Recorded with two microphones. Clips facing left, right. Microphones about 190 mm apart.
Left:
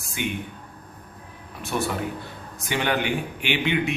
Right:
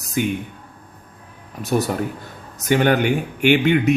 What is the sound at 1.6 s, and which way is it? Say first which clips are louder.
Speech: right 6 dB; 40° right (ahead or behind).